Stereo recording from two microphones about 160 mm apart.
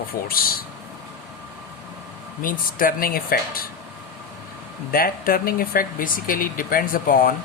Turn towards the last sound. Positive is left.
turn(degrees=60)  # may be behind; listen again after turning